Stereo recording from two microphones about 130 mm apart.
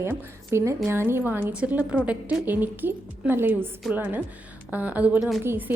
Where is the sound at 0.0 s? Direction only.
20° right (ahead or behind).